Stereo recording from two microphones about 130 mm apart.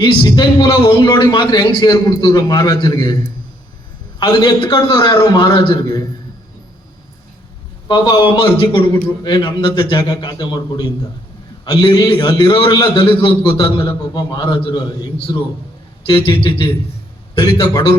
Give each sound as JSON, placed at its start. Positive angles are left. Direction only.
{"t": 0.0, "sound": "a man's voice", "side_deg": 35}
{"t": 4.2, "sound": "a man's voice", "side_deg": 35}
{"t": 7.9, "sound": "a man's voice", "side_deg": 35}
{"t": 13.7, "sound": "a man's voice", "side_deg": 30}
{"t": 16.0, "sound": "a man's voice", "side_deg": 40}